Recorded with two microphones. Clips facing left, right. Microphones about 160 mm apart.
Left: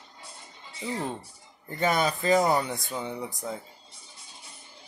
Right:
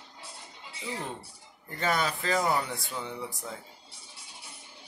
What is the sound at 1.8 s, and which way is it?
Speech, 15° left (ahead or behind).